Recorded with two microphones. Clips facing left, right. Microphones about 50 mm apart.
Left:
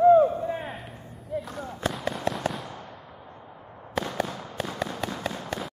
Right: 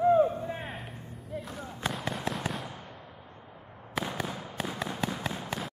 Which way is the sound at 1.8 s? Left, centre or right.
Centre.